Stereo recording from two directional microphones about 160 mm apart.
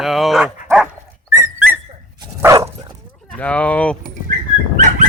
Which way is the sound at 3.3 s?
10° left (ahead or behind).